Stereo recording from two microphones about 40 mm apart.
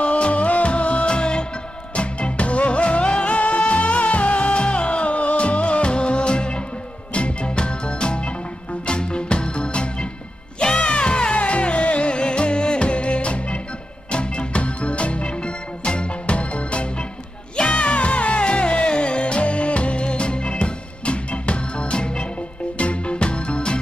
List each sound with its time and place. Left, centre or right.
0.0 s music: left